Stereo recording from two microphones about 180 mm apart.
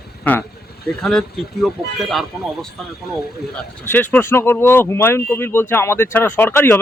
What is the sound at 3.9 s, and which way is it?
A man's voice, 10° left (ahead or behind).